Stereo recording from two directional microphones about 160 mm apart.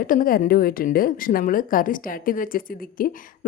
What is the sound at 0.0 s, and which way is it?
A woman's voice, 60° left (ahead or behind).